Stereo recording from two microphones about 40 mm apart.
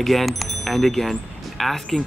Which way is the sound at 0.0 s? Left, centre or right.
Centre.